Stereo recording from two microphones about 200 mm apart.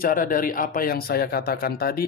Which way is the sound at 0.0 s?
45° left (ahead or behind).